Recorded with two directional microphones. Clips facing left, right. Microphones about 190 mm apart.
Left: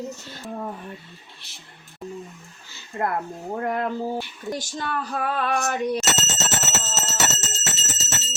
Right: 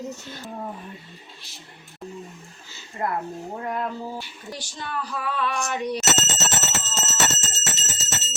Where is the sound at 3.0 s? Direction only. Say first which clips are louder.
Left 2 dB; 60° left (ahead or behind).